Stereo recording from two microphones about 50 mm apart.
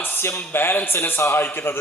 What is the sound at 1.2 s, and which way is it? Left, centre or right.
Speech, left.